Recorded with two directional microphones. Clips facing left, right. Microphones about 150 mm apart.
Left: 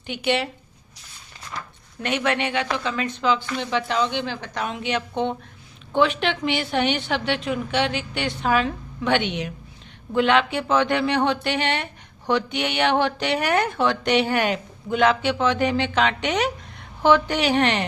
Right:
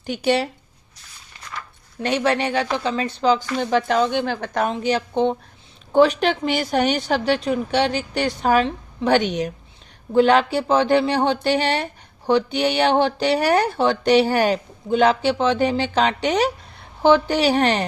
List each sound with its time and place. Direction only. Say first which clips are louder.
0.0 s speech: right 4 dB; 40° right (ahead or behind)
2.0 s speech: right 3 dB; 35° right (ahead or behind); by 4.7 s 50° right (ahead or behind)
4.7 s speech: right 5 dB; 35° right (ahead or behind)